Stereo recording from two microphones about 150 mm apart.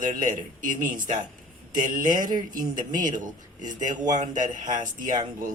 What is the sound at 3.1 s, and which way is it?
Speech, 60° right (ahead or behind).